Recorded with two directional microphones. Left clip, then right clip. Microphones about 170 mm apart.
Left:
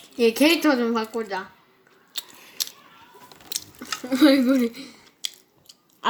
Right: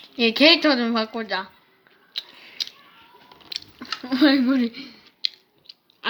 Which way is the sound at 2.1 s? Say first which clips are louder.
Right 1 dB; 35° left (ahead or behind).